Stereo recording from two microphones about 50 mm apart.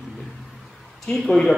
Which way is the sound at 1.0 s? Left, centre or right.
Centre.